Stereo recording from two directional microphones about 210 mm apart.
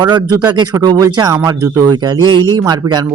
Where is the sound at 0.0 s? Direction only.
20° right (ahead or behind).